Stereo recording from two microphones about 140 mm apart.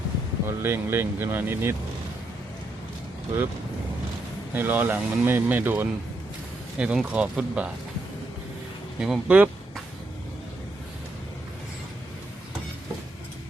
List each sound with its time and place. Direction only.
0.4 s speech: 15° right (ahead or behind)
4.5 s speech: 15° right (ahead or behind)
9.0 s speech: 5° right (ahead or behind)